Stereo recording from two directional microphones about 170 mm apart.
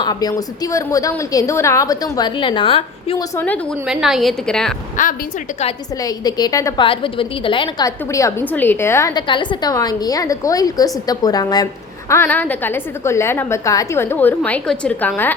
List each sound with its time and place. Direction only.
0.0 s a woman's voice: 20° left (ahead or behind)
3.2 s a woman's voice: 10° left (ahead or behind)
3.8 s a woman's voice: centre (ahead or behind)
5.0 s a woman's voice: 50° left (ahead or behind)
6.0 s a woman's voice: 20° left (ahead or behind)
6.8 s a woman's voice: 30° left (ahead or behind)
7.9 s a woman's voice: 20° left (ahead or behind)
9.2 s a woman's voice: 30° left (ahead or behind); by 15.4 s 10° left (ahead or behind)